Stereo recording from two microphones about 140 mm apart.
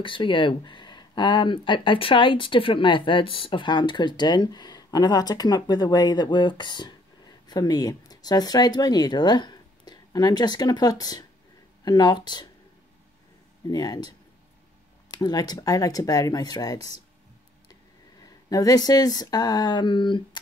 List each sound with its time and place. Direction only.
0.0 s speech: 35° left (ahead or behind)
13.7 s speech: 30° left (ahead or behind)
15.1 s speech: 30° left (ahead or behind)
18.2 s speech: 25° left (ahead or behind)